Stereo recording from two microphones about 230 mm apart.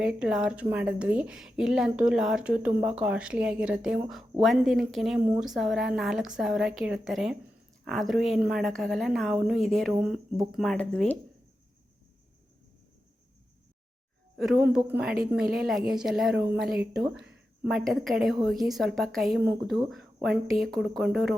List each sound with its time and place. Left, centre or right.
0.0 s a woman's voice: centre
14.3 s a woman's voice: centre